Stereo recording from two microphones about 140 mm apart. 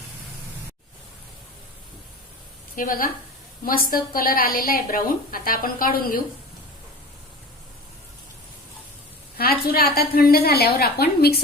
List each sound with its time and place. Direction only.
2.7 s a woman's voice: 85° left
9.4 s a woman's voice: 90° left